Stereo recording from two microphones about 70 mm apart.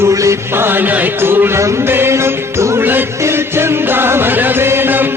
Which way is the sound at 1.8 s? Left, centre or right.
Right.